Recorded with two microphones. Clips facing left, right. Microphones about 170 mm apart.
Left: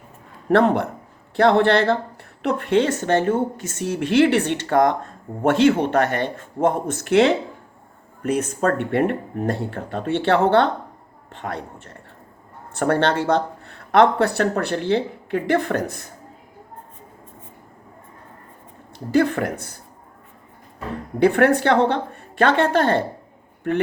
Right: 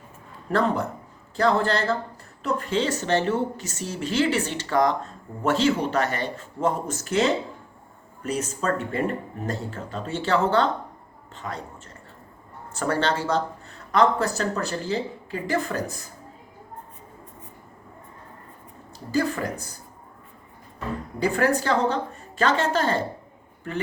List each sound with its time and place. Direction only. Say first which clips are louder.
0.4 s a woman's voice: left 6 dB; 65° left (ahead or behind)
12.7 s a woman's voice: left 5 dB; 60° left (ahead or behind)
18.9 s a woman's voice: left 6 dB; 60° left (ahead or behind)
21.2 s a woman's voice: left 7 dB; 60° left (ahead or behind)